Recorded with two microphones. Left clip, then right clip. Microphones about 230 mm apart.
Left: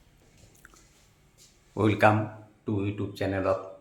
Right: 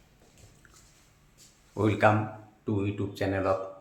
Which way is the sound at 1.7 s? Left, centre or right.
Left.